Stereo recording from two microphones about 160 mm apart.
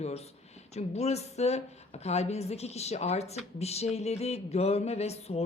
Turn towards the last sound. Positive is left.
turn(degrees=40)  # may be behind; listen again after turning